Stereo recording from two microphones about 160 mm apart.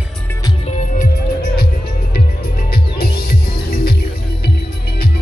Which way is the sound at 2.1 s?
70° left (ahead or behind).